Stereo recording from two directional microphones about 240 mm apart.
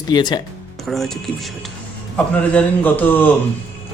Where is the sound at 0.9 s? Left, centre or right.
Centre.